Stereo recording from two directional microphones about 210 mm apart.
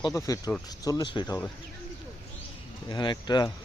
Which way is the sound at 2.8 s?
20° left (ahead or behind).